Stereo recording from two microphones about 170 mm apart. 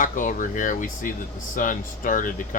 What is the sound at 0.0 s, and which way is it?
Speech, 50° left (ahead or behind).